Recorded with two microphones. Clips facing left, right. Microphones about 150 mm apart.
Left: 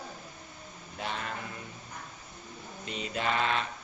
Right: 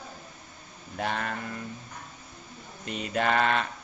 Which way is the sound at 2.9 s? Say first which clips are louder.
Right 5 dB; 55° right (ahead or behind).